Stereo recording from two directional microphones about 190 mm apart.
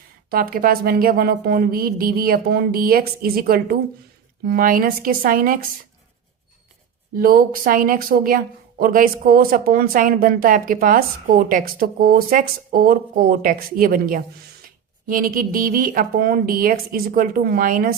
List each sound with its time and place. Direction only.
0.3 s speech: 50° right (ahead or behind)
7.2 s speech: 50° right (ahead or behind)